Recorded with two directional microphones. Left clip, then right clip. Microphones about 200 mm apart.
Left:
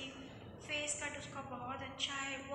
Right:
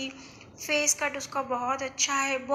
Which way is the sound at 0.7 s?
45° right (ahead or behind).